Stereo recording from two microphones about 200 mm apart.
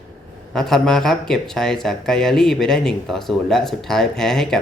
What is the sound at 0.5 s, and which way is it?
Speech, centre (ahead or behind).